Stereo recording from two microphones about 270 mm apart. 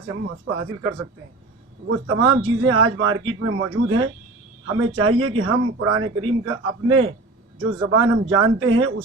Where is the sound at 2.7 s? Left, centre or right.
Right.